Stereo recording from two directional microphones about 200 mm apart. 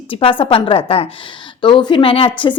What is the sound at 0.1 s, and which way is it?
A woman's voice, 25° left (ahead or behind).